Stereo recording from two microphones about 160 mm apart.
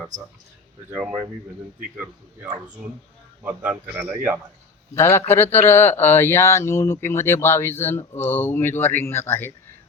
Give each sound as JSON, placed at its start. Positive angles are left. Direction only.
{"t": 0.9, "sound": "speech", "side_deg": -5}
{"t": 3.4, "sound": "speech", "side_deg": -10}
{"t": 4.9, "sound": "speech", "side_deg": 15}